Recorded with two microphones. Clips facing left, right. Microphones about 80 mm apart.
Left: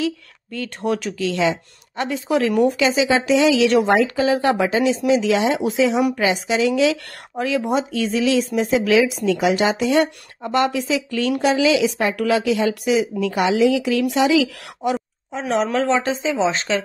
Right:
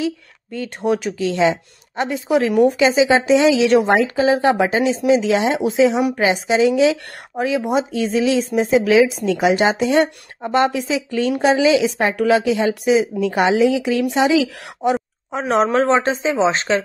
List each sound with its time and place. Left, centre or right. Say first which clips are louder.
0.0 s speech: right 1 dB; right
15.4 s speech: right 3 dB; right